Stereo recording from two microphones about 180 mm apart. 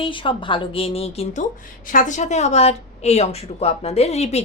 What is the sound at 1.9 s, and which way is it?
A woman's voice, 45° left (ahead or behind).